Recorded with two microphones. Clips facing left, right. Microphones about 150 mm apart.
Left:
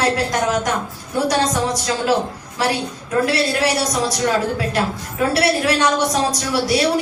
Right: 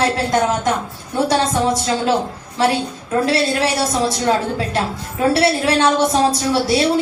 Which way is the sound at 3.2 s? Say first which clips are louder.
Right 1 dB; 25° right (ahead or behind).